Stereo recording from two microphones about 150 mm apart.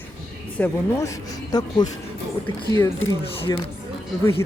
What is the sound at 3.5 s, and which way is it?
Speech, 25° left (ahead or behind).